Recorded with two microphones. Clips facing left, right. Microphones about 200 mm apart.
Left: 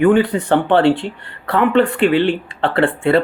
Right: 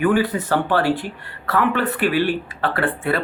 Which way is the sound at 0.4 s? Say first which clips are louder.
Left 6 dB; 25° left (ahead or behind).